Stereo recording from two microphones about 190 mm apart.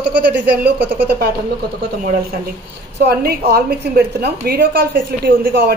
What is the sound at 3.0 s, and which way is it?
A woman's voice, 55° right (ahead or behind).